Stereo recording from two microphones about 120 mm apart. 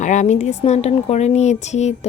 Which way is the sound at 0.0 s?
85° left.